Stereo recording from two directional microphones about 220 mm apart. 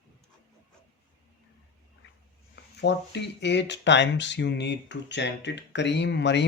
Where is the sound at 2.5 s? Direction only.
50° left (ahead or behind).